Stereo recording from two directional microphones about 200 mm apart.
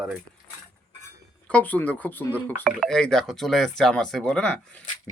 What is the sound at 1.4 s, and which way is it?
Speech, 5° left (ahead or behind).